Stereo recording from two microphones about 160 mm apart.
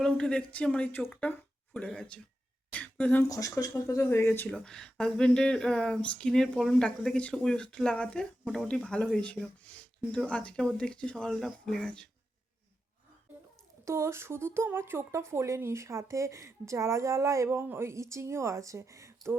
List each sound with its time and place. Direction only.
0.0 s speech: 5° left (ahead or behind)
3.2 s speech: 20° left (ahead or behind); by 12.0 s 5° left (ahead or behind)
13.8 s speech: 15° right (ahead or behind)